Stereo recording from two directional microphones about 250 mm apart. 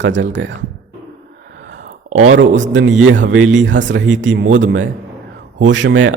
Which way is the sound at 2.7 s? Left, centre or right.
Right.